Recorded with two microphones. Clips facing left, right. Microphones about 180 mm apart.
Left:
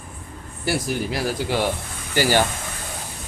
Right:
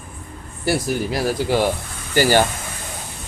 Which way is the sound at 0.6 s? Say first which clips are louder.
Right 3 dB; 40° right (ahead or behind).